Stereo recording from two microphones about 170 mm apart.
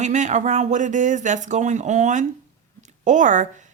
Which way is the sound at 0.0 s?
45° right (ahead or behind).